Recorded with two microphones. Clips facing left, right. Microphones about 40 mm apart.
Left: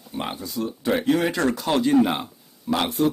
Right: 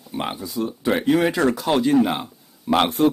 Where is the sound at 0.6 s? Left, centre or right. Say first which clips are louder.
Right 2 dB; centre.